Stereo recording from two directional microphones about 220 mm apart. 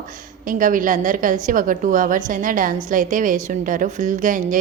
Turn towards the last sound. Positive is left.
turn(degrees=-35)  # may be behind; listen again after turning